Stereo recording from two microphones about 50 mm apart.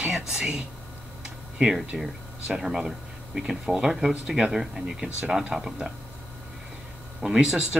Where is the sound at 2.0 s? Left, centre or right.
Centre.